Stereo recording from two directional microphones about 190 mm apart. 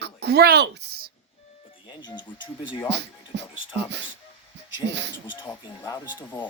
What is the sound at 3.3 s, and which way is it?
Speech, 65° right (ahead or behind).